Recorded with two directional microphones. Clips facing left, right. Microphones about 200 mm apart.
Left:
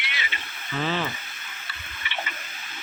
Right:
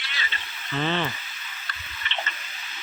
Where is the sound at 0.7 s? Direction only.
5° left (ahead or behind).